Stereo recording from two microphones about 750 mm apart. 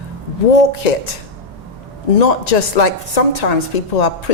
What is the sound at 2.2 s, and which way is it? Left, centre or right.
A woman's voice, left.